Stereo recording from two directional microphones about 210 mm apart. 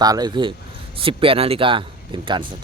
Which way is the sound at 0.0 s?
20° right (ahead or behind).